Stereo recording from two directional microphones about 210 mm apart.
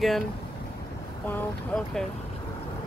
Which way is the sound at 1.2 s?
5° left (ahead or behind).